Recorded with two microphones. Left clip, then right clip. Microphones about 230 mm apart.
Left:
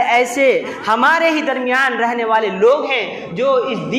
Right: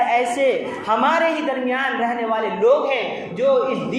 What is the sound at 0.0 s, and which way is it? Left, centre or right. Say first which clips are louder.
A woman's voice: left 4 dB; left.